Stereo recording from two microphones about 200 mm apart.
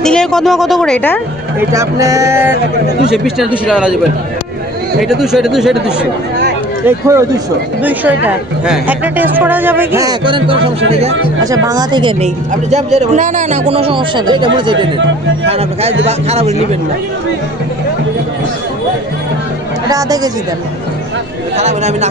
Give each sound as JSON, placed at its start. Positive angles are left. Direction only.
{"t": 0.0, "sound": "speech", "side_deg": 5}
{"t": 1.6, "sound": "a woman's voice", "side_deg": -15}
{"t": 3.1, "sound": "speech", "side_deg": 0}
{"t": 5.0, "sound": "speech", "side_deg": 0}
{"t": 6.9, "sound": "a woman's voice", "side_deg": -15}
{"t": 11.4, "sound": "a man's voice", "side_deg": -15}
{"t": 19.9, "sound": "speech", "side_deg": -15}
{"t": 21.5, "sound": "a man's voice", "side_deg": -35}